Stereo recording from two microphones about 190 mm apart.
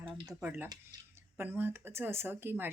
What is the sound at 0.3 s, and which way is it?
Speech, 10° right (ahead or behind).